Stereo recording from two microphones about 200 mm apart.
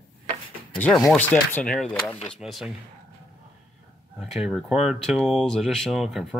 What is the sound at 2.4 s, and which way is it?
Speech, 5° right (ahead or behind).